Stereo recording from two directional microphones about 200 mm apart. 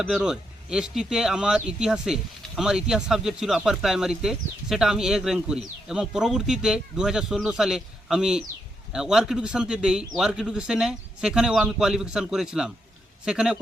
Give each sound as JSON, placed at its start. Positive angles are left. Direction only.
{"t": 0.0, "sound": "speech", "side_deg": -5}